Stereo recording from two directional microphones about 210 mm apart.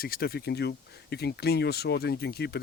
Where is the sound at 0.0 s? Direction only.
45° left (ahead or behind).